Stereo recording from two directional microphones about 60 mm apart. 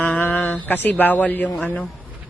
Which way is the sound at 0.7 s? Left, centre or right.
Left.